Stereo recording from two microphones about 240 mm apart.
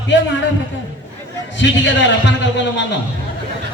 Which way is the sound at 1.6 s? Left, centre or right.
Left.